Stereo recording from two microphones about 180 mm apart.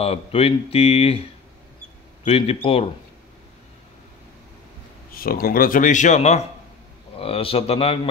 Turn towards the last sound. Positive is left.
turn(degrees=35)  # may be behind; listen again after turning